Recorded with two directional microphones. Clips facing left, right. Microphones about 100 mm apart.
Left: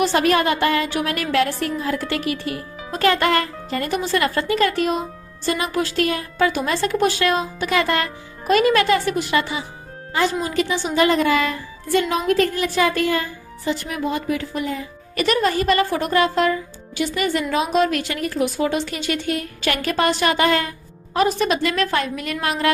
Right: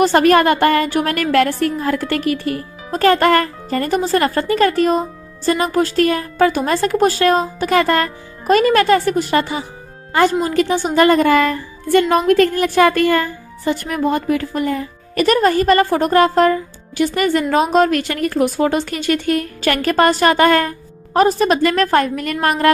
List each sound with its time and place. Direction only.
0.0 s a woman's voice: 50° right (ahead or behind)
10.1 s a woman's voice: 55° right (ahead or behind)